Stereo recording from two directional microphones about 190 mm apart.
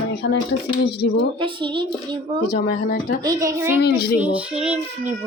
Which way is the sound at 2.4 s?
55° left (ahead or behind).